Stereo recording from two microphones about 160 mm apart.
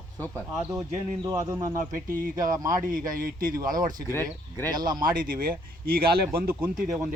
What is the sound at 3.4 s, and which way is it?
Speech, 60° right (ahead or behind).